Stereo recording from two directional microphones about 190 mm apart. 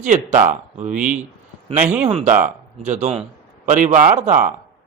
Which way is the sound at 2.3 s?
40° right (ahead or behind).